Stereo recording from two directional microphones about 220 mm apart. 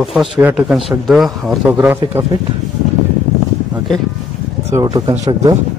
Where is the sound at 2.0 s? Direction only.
15° right (ahead or behind).